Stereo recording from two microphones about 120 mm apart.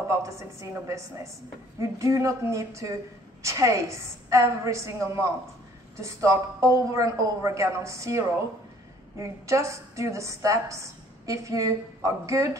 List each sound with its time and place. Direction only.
0.1 s a woman's voice: 25° right (ahead or behind)